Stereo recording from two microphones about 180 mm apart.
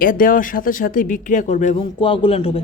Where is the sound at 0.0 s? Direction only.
50° left (ahead or behind).